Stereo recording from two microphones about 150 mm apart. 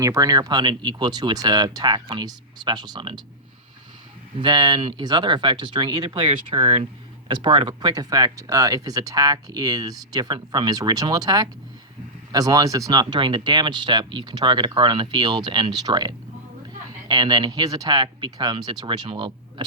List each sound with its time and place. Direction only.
0.0 s speech: 25° right (ahead or behind)
4.4 s speech: 30° right (ahead or behind)